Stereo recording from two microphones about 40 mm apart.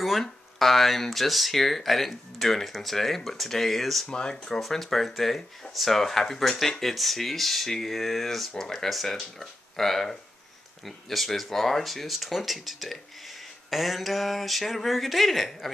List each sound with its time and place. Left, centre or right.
0.2 s speech: centre
4.1 s speech: centre
4.6 s speech: centre